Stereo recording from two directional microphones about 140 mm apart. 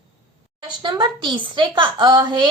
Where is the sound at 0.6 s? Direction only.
35° right (ahead or behind).